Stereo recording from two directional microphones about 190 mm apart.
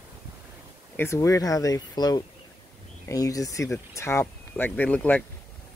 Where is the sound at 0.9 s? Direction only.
15° left (ahead or behind).